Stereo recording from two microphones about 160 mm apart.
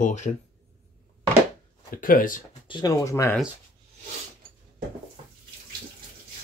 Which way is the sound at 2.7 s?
25° left (ahead or behind).